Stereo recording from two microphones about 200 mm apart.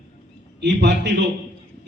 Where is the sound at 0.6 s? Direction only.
60° right (ahead or behind).